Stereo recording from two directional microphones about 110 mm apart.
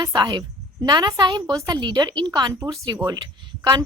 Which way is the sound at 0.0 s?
40° right (ahead or behind).